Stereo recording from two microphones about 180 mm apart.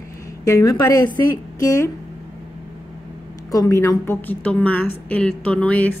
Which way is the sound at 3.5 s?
20° left (ahead or behind).